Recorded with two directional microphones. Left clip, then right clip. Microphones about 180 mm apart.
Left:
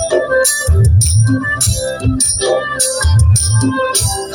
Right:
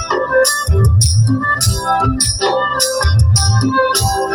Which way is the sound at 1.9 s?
35° left (ahead or behind).